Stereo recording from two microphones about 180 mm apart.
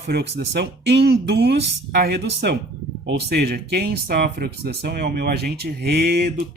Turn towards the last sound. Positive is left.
turn(degrees=-60)  # may be behind; listen again after turning